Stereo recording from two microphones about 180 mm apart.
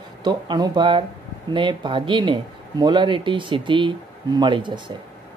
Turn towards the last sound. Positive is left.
turn(degrees=-25)  # may be behind; listen again after turning